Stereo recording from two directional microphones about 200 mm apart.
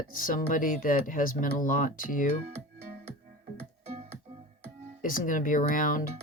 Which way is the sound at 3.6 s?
30° right (ahead or behind).